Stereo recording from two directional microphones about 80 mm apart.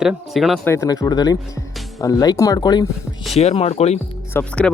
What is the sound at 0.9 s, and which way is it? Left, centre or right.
Speech, left.